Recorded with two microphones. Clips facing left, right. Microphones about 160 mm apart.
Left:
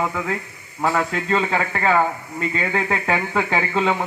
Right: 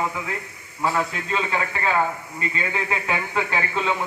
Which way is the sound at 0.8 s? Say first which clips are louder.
Left 3 dB; 85° left.